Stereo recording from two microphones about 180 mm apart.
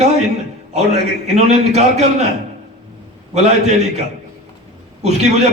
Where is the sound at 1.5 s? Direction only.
35° right (ahead or behind).